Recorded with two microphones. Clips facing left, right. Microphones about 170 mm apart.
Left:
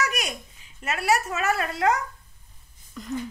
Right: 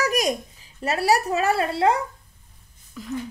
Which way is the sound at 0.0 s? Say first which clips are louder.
Right 7 dB; 35° right (ahead or behind).